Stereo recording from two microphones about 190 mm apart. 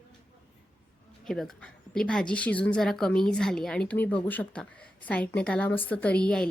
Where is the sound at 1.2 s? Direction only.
Centre (ahead or behind).